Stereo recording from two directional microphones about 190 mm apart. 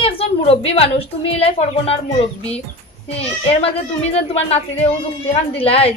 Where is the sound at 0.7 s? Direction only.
30° left (ahead or behind).